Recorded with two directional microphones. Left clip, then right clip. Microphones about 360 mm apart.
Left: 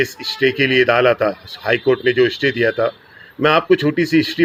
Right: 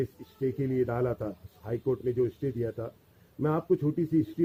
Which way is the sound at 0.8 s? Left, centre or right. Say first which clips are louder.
Left 18 dB; centre.